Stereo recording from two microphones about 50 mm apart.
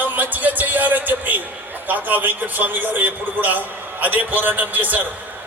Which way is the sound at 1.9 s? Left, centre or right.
Right.